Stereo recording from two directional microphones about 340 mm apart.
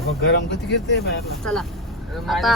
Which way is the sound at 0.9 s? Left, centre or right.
Left.